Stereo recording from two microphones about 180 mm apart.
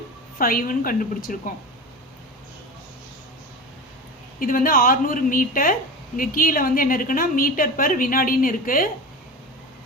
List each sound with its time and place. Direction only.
0.3 s a woman's voice: 50° left (ahead or behind)
4.4 s a woman's voice: 50° left (ahead or behind)